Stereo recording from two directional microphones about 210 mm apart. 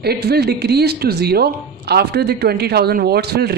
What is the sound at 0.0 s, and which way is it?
A woman's voice, 50° right (ahead or behind).